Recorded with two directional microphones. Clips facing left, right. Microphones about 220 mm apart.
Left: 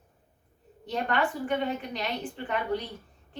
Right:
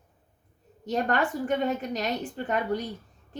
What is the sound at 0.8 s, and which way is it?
A woman's voice, 45° right (ahead or behind).